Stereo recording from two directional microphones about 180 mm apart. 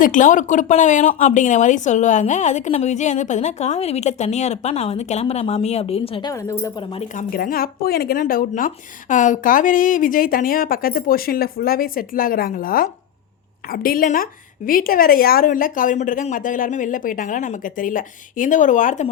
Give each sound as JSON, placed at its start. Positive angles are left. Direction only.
{"t": 0.0, "sound": "speech", "side_deg": 45}
{"t": 6.3, "sound": "a woman's voice", "side_deg": 15}
{"t": 7.1, "sound": "speech", "side_deg": 50}